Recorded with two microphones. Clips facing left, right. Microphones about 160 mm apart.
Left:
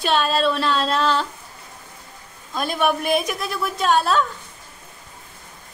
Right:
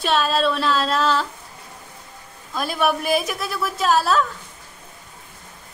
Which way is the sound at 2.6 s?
Centre (ahead or behind).